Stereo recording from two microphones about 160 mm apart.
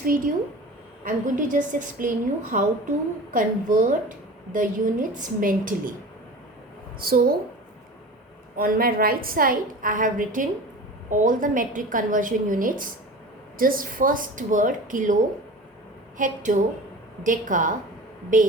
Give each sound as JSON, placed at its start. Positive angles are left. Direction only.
{"t": 1.0, "sound": "a woman's voice", "side_deg": -55}
{"t": 7.0, "sound": "a woman's voice", "side_deg": -70}
{"t": 8.5, "sound": "a woman's voice", "side_deg": -65}